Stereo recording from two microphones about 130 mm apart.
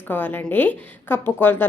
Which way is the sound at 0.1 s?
15° left (ahead or behind).